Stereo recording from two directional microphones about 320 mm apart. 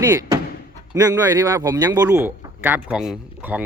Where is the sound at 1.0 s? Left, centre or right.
Centre.